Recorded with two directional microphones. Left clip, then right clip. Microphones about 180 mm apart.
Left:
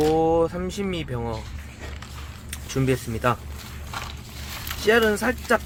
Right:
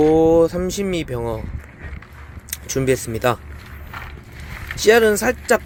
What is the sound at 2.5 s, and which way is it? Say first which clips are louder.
Speech: right 6 dB; 20° right (ahead or behind).